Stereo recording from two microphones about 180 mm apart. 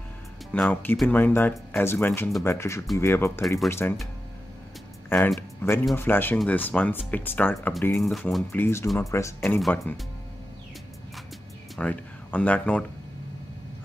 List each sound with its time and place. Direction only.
0.5 s speech: 10° left (ahead or behind)
3.4 s speech: centre (ahead or behind)
5.1 s speech: 10° left (ahead or behind)
8.5 s speech: 10° left (ahead or behind)
11.7 s speech: 5° left (ahead or behind)